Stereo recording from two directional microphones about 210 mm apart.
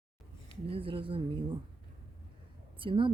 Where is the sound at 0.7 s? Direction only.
25° right (ahead or behind).